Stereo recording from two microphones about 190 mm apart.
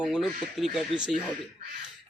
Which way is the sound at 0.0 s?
Centre (ahead or behind).